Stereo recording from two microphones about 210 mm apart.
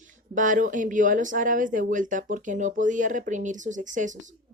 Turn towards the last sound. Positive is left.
turn(degrees=-35)  # may be behind; listen again after turning